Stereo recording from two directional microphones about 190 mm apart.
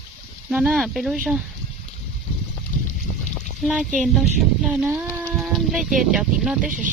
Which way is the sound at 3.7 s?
Centre (ahead or behind).